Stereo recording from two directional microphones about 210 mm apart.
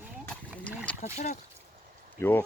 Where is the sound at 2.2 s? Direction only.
10° left (ahead or behind).